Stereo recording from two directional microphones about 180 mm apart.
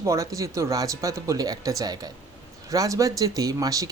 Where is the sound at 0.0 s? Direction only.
15° right (ahead or behind).